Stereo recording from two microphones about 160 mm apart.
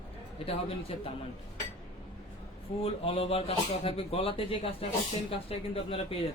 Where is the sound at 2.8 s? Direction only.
35° left (ahead or behind).